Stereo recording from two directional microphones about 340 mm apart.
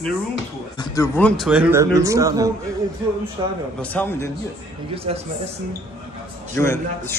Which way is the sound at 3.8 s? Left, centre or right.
Centre.